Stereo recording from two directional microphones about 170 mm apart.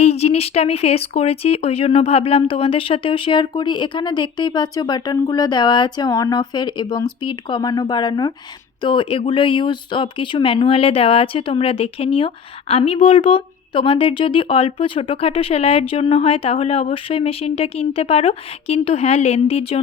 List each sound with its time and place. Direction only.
0.0 s speech: 40° left (ahead or behind)